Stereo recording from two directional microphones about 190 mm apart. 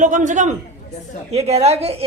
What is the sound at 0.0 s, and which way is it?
A woman's voice, 40° right (ahead or behind).